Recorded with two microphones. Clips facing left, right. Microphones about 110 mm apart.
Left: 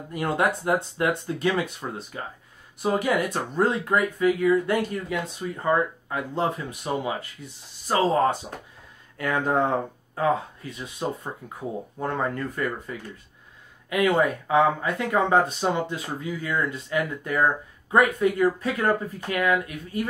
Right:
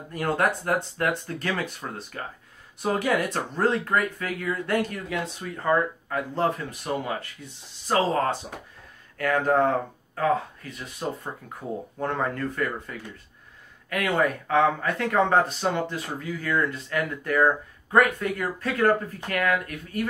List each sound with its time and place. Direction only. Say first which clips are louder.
0.1 s speech: even; 10° left (ahead or behind)
12.0 s speech: even; 5° left (ahead or behind)
13.8 s speech: left 3 dB; 15° left (ahead or behind)